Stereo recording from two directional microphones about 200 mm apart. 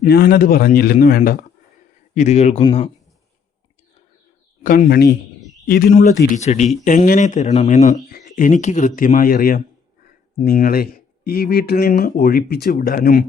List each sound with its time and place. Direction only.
0.0 s a man's voice: 50° left (ahead or behind)
2.1 s speech: 35° left (ahead or behind)
4.6 s a man's voice: 40° left (ahead or behind)